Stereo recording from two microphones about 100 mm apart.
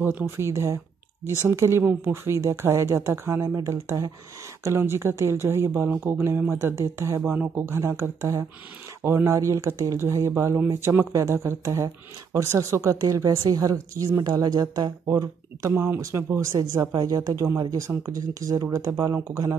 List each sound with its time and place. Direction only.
0.0 s a woman's voice: 20° right (ahead or behind)
7.2 s a woman's voice: 20° right (ahead or behind); by 19.1 s 35° right (ahead or behind)